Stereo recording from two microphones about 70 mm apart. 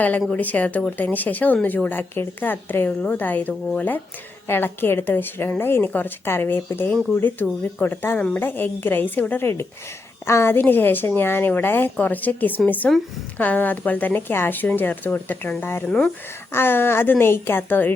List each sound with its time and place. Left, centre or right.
0.3 s a woman's voice: left